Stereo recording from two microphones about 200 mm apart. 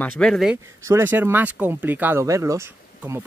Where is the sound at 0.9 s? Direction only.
10° right (ahead or behind).